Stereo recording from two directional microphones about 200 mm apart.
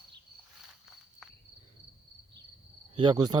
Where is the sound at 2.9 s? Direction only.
25° right (ahead or behind).